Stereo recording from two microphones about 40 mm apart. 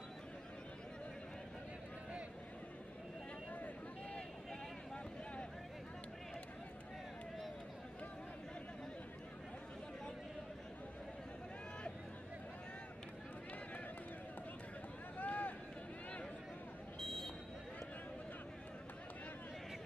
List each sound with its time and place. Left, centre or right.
15.1 s run: left
17.0 s vehicle: centre